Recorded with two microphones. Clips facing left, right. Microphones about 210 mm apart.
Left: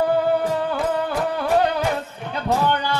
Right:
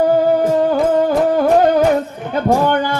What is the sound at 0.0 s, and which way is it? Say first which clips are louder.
Music: right 6 dB; 40° right (ahead or behind).